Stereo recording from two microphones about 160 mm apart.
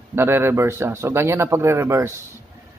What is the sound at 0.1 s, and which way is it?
Speech, 15° right (ahead or behind).